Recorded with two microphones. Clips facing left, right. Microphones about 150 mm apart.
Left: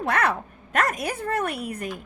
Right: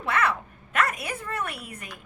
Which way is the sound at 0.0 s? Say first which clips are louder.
Left 2 dB; 40° left (ahead or behind).